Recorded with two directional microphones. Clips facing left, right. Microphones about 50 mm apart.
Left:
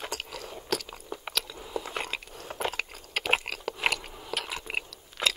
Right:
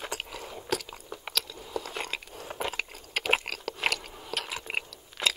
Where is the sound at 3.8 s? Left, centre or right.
Centre.